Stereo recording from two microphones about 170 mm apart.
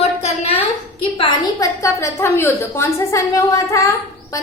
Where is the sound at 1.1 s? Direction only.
30° left (ahead or behind).